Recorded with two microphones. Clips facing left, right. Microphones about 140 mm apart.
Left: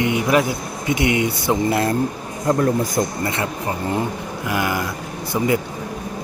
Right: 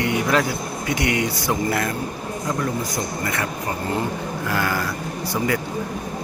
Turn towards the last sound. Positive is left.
turn(degrees=20)  # may be behind; listen again after turning